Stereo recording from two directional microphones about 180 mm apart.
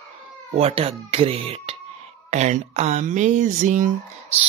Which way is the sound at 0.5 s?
35° right (ahead or behind).